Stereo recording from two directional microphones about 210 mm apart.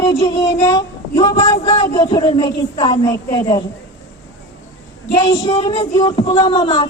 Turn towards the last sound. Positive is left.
turn(degrees=20)  # may be behind; listen again after turning